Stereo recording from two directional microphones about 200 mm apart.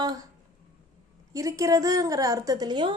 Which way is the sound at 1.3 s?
15° right (ahead or behind).